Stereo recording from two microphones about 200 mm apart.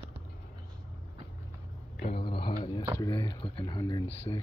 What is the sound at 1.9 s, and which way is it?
Mantra, 30° left (ahead or behind).